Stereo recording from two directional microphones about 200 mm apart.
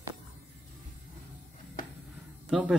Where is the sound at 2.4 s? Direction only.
Centre (ahead or behind).